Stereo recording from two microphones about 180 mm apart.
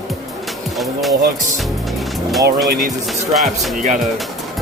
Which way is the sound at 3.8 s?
45° right (ahead or behind).